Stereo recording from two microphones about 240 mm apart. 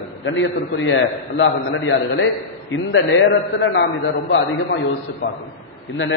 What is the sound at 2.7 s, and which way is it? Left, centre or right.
A man's voice, left.